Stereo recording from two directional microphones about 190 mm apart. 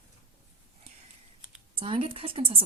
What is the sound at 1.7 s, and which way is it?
Speech, 30° right (ahead or behind).